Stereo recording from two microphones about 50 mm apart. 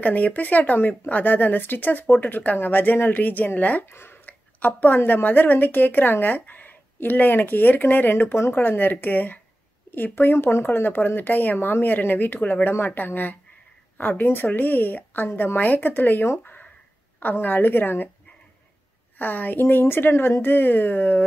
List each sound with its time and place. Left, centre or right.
0.0 s speech: left
3.8 s speech: left
4.3 s speech: left
19.1 s speech: left